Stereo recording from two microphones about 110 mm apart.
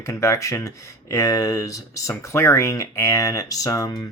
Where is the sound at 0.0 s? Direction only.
30° left (ahead or behind).